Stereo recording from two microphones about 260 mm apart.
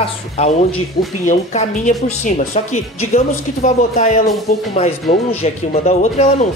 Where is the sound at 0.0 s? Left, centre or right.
Left.